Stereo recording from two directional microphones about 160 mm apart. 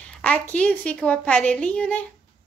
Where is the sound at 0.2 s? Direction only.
10° left (ahead or behind).